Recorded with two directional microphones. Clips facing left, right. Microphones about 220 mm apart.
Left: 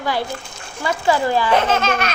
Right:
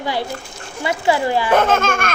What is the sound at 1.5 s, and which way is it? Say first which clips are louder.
Speech: right 2 dB; 50° right (ahead or behind).